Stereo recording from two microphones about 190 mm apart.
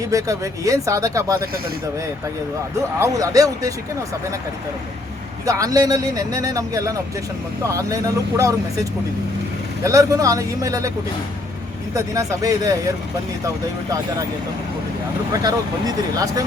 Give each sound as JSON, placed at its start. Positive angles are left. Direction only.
{"t": 0.1, "sound": "speech", "side_deg": -15}
{"t": 3.0, "sound": "speech", "side_deg": -20}
{"t": 5.5, "sound": "speech", "side_deg": -20}
{"t": 11.9, "sound": "speech", "side_deg": -15}
{"t": 15.3, "sound": "speech", "side_deg": -20}